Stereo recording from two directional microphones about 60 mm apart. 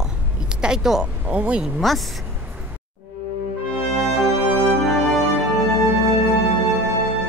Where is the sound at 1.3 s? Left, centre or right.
Centre.